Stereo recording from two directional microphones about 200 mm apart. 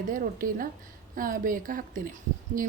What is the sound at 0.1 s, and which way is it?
A woman's voice, 45° right (ahead or behind).